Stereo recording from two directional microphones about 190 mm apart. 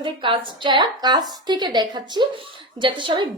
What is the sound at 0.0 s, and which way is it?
A woman's voice, 25° right (ahead or behind).